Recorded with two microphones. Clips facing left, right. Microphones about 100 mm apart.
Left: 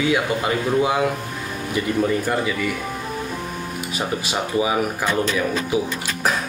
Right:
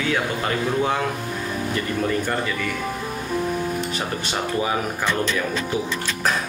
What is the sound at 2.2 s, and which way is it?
Speech, 10° left (ahead or behind).